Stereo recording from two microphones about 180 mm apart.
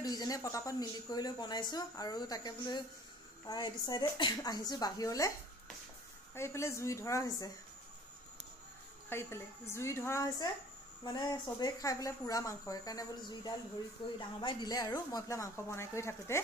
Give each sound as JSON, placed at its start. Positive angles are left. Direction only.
{"t": 0.0, "sound": "speech", "side_deg": 20}
{"t": 6.3, "sound": "speech", "side_deg": 15}
{"t": 9.1, "sound": "speech", "side_deg": 15}